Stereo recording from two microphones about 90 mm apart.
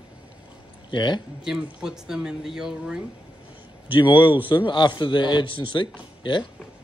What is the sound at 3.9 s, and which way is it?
Speech, 70° left (ahead or behind).